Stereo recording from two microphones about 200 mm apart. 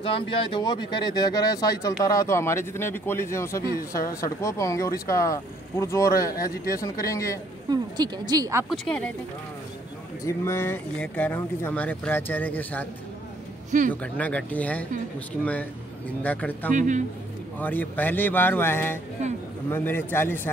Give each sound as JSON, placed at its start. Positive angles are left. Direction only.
{"t": 0.0, "sound": "speech", "side_deg": 25}
{"t": 7.7, "sound": "a woman's voice", "side_deg": -20}
{"t": 8.6, "sound": "speech", "side_deg": 0}
{"t": 10.2, "sound": "speech", "side_deg": 15}
{"t": 13.7, "sound": "a man's voice", "side_deg": -40}
{"t": 14.0, "sound": "speech", "side_deg": 5}
{"t": 16.2, "sound": "speech", "side_deg": 10}
{"t": 16.7, "sound": "a man's voice", "side_deg": -40}
{"t": 17.6, "sound": "speech", "side_deg": 10}